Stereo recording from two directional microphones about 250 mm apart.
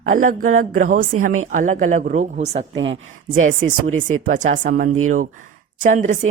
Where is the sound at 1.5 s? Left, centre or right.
Right.